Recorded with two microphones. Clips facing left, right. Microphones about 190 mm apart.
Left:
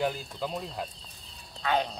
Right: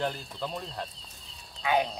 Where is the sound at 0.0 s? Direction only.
5° left (ahead or behind).